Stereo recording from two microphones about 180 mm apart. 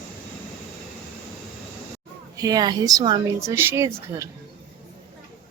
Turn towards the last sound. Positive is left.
turn(degrees=-15)  # may be behind; listen again after turning